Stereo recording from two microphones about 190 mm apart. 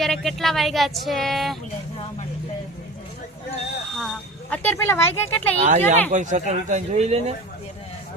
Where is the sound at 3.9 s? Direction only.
5° left (ahead or behind).